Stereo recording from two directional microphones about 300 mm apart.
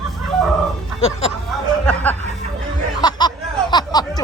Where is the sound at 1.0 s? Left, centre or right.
Centre.